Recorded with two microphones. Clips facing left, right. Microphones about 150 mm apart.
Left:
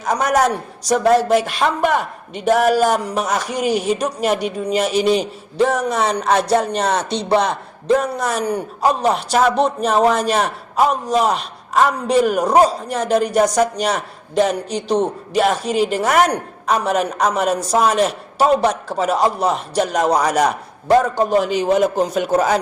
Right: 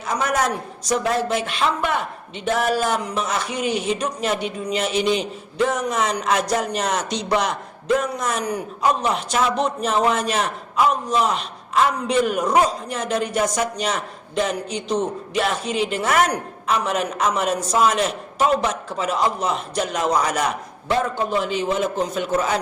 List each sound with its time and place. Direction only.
0.0 s speech: 40° left (ahead or behind)